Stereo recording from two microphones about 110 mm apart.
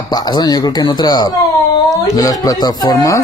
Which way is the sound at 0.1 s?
40° left (ahead or behind).